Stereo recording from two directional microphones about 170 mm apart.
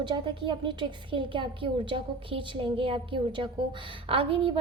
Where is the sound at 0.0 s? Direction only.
30° right (ahead or behind).